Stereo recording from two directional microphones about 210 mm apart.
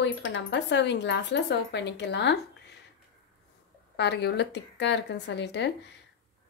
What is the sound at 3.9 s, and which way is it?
A woman's voice, 55° left (ahead or behind).